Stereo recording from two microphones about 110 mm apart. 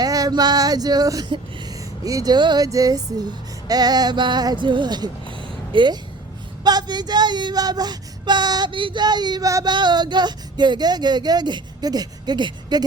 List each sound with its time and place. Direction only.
0.0 s female singing: 35° right (ahead or behind)
2.0 s speech: 35° right (ahead or behind)
9.7 s speech: 40° right (ahead or behind)